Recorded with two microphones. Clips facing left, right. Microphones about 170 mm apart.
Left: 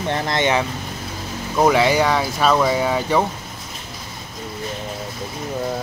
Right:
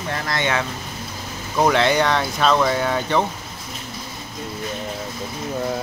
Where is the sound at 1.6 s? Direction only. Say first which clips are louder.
Left 2 dB; 10° left (ahead or behind).